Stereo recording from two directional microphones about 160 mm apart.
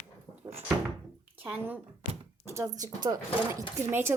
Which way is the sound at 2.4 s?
15° right (ahead or behind).